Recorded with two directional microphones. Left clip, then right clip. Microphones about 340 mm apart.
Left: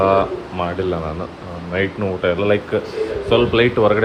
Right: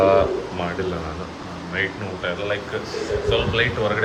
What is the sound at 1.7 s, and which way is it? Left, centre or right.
Speech, centre.